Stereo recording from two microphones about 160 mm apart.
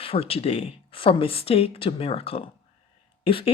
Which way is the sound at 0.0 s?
35° left (ahead or behind).